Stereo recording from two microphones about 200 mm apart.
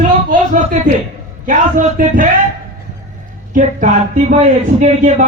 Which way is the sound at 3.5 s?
40° right (ahead or behind).